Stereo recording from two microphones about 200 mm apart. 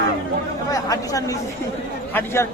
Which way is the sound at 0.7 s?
15° left (ahead or behind).